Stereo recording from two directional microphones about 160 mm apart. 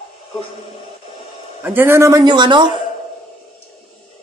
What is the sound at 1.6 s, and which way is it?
A man's voice, 10° right (ahead or behind).